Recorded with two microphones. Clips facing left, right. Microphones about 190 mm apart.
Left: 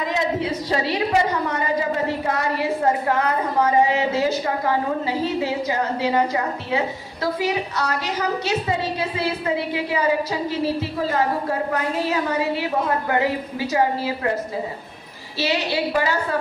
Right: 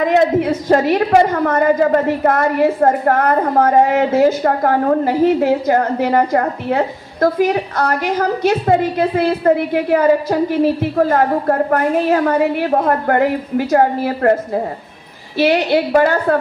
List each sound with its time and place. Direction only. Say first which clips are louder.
0.0 s a woman's voice: right 10 dB; 60° right (ahead or behind)